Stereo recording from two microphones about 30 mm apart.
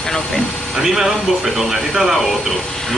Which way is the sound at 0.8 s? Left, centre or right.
Centre.